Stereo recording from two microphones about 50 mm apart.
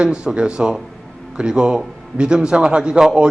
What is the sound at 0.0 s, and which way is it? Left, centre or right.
A man's voice, centre.